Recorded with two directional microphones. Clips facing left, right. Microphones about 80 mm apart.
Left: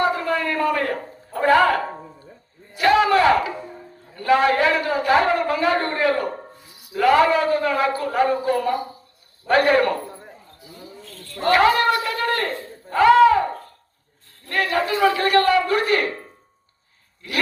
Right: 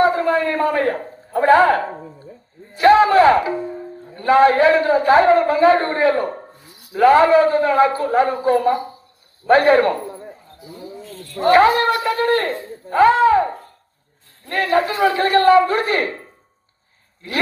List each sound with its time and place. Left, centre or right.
0.0 s a man's voice: right
2.7 s a sound: right
4.1 s a man's voice: right
11.3 s a man's voice: right
12.9 s a sound: right
14.5 s a man's voice: right